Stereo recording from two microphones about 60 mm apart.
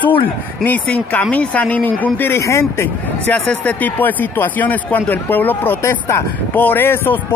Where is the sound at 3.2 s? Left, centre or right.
Left.